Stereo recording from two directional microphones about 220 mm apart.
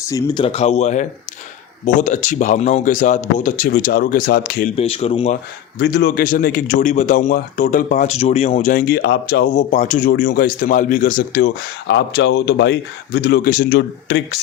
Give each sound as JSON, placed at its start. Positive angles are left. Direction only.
{"t": 0.1, "sound": "speech", "side_deg": 25}
{"t": 4.8, "sound": "speech", "side_deg": 25}
{"t": 5.8, "sound": "speech", "side_deg": 50}